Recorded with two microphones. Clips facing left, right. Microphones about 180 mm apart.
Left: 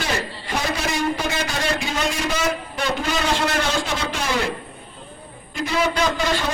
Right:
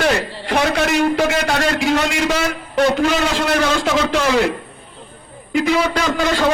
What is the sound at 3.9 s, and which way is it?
Speech, 90° right.